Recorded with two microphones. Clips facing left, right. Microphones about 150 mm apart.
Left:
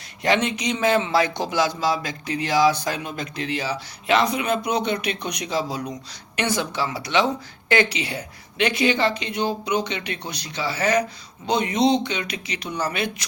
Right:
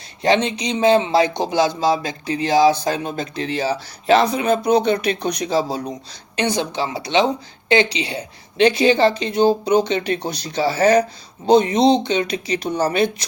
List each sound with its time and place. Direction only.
0.4 s speech: 25° right (ahead or behind)